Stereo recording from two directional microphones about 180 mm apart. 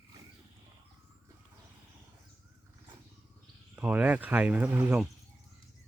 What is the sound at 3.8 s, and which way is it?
Speech, 5° right (ahead or behind).